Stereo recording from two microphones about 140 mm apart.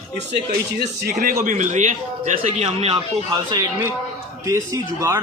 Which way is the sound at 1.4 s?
60° right (ahead or behind).